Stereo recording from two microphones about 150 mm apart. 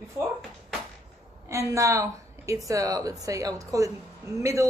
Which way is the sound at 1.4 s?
20° right (ahead or behind).